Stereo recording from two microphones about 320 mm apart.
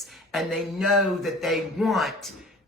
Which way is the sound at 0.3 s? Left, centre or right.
Centre.